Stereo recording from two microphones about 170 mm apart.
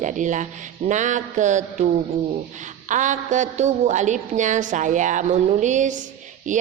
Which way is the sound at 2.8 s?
45° right (ahead or behind).